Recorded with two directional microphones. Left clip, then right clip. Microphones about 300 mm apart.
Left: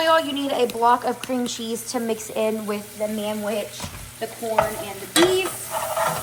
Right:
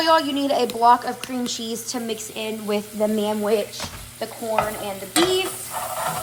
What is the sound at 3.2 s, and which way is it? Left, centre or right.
Speech, right.